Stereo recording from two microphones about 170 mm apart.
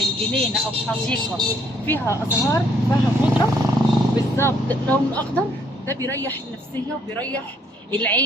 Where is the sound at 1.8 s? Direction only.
10° left (ahead or behind).